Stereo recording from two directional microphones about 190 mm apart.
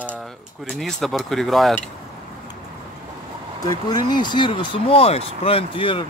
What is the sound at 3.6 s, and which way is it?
Speech, 20° left (ahead or behind).